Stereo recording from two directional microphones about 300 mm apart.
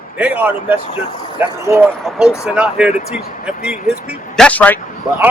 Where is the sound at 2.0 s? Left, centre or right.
Centre.